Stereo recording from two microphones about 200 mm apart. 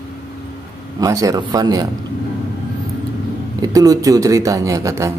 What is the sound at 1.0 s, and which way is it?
Speech, 15° right (ahead or behind).